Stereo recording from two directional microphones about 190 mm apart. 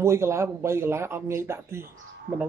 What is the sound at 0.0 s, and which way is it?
Speech, 15° right (ahead or behind).